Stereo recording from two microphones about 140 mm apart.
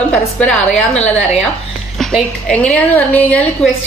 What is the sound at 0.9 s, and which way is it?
Speech, 50° left (ahead or behind).